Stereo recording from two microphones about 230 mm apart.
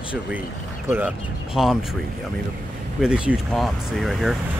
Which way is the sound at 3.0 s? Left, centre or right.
Centre.